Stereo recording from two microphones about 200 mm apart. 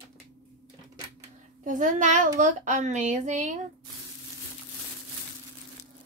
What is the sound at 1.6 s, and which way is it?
Speech, 40° right (ahead or behind).